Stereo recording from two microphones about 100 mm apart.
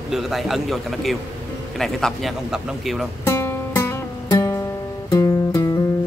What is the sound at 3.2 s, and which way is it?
Music, 25° left (ahead or behind).